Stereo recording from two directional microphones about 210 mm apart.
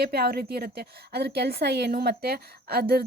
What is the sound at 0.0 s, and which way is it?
A woman's voice, 50° right (ahead or behind).